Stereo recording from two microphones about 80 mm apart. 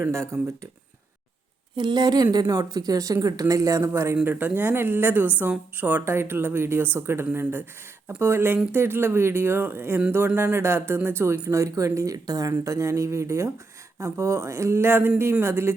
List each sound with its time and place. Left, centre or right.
0.1 s speech: right
1.7 s speech: right
4.2 s a woman's voice: right